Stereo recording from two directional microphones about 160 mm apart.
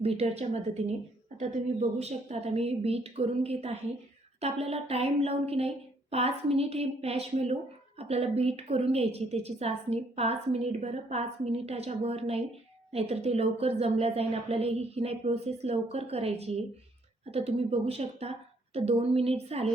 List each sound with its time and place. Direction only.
0.0 s a woman's voice: 40° right (ahead or behind)